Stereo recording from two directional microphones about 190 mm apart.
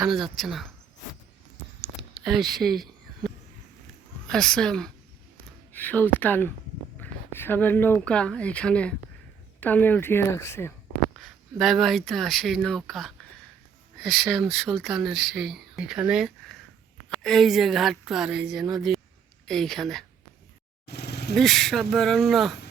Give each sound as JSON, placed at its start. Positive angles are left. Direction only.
{"t": 0.0, "sound": "speech", "side_deg": 0}
{"t": 2.1, "sound": "a sound", "side_deg": 0}
{"t": 4.3, "sound": "speech", "side_deg": 5}
{"t": 11.2, "sound": "speech", "side_deg": 0}
{"t": 20.8, "sound": "vehicle", "side_deg": 60}
{"t": 21.3, "sound": "speech", "side_deg": 0}